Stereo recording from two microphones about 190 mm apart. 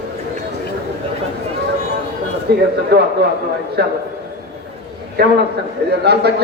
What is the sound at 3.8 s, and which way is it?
Speech, 60° right (ahead or behind).